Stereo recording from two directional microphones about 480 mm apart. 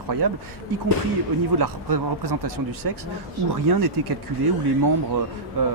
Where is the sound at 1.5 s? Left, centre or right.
Right.